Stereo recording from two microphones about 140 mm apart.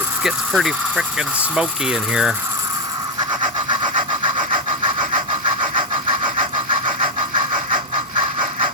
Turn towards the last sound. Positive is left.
turn(degrees=-35)  # may be behind; listen again after turning